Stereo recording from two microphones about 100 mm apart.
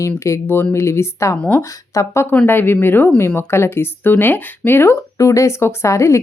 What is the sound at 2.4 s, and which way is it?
Speech, 20° left (ahead or behind).